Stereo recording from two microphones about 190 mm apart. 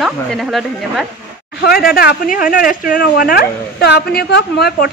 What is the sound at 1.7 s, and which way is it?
Speech, 50° left (ahead or behind).